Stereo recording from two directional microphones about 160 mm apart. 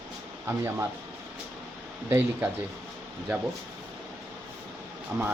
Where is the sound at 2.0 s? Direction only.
15° right (ahead or behind).